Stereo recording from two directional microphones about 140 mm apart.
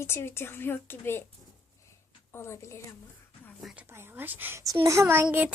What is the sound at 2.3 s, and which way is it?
Speech, 20° left (ahead or behind).